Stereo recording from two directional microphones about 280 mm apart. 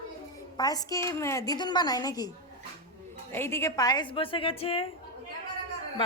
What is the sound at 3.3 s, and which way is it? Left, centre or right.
A woman's voice, centre.